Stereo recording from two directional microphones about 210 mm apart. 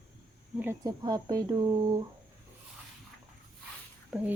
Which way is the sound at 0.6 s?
15° right (ahead or behind).